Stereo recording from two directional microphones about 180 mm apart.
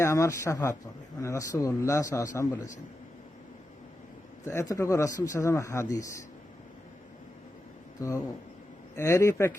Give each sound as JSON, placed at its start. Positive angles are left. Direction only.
{"t": 0.0, "sound": "speech", "side_deg": 15}
{"t": 4.4, "sound": "speech", "side_deg": 15}
{"t": 8.0, "sound": "speech", "side_deg": 15}